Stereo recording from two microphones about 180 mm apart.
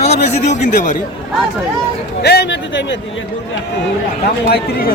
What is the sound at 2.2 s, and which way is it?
Speech, 65° left (ahead or behind).